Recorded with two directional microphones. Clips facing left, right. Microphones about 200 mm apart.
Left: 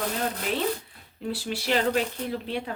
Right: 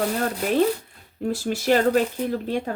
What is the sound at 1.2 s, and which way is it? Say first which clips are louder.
A woman's voice: right 7 dB; 45° right (ahead or behind).